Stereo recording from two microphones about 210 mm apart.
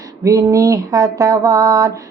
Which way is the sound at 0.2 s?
15° right (ahead or behind).